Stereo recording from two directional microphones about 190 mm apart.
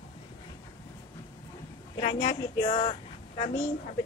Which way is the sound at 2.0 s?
35° left (ahead or behind).